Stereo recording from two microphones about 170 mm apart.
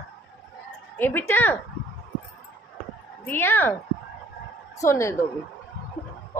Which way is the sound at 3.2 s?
10° left (ahead or behind).